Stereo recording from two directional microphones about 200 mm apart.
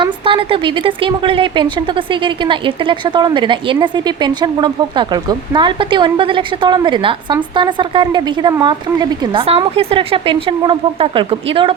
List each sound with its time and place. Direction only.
0.0 s speech: 25° right (ahead or behind)